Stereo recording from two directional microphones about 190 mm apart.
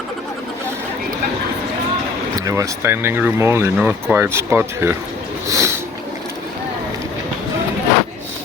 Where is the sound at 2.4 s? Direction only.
15° right (ahead or behind).